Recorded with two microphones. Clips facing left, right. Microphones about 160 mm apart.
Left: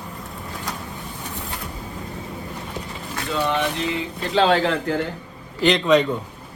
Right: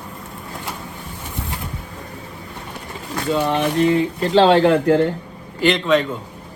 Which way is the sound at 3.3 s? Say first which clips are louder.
Right 4 dB; 40° right (ahead or behind).